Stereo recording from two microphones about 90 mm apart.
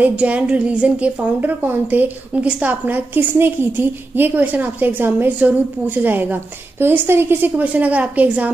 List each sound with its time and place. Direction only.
0.0 s a woman's voice: 15° right (ahead or behind)